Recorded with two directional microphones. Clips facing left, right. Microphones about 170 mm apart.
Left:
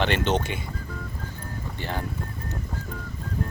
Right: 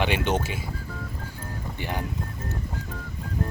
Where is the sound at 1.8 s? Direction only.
15° right (ahead or behind).